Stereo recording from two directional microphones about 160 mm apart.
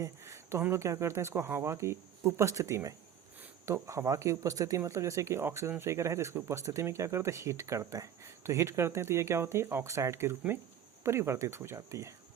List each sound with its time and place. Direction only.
0.0 s speech: 20° right (ahead or behind)